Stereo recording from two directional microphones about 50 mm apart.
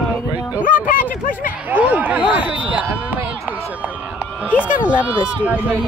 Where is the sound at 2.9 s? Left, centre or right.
Right.